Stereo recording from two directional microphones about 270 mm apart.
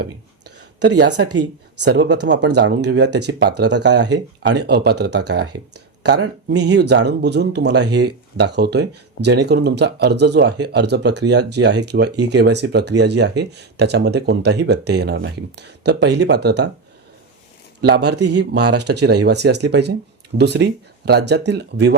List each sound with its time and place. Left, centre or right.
0.0 s a sound: right
1.3 s speech: right
1.8 s speech: right
17.7 s speech: right